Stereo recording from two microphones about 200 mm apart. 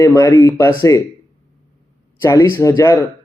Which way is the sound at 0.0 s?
15° left (ahead or behind).